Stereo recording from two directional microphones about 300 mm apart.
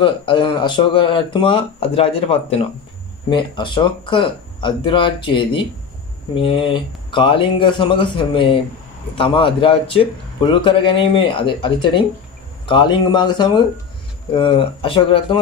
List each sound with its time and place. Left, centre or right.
0.0 s a man's voice: centre